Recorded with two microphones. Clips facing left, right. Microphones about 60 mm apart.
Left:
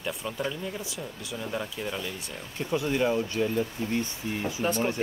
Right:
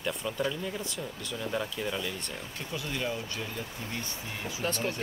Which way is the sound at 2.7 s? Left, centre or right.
Left.